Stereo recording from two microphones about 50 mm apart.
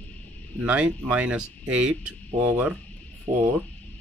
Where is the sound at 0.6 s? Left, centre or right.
Right.